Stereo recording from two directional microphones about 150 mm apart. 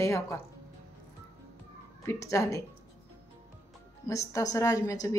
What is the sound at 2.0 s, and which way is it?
Speech, 20° left (ahead or behind).